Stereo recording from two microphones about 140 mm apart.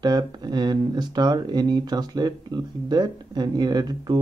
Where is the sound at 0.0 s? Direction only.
30° right (ahead or behind).